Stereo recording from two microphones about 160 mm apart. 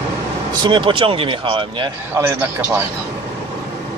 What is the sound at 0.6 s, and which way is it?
Speech, 30° right (ahead or behind).